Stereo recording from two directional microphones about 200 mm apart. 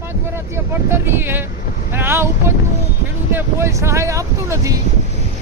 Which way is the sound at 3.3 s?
15° right (ahead or behind).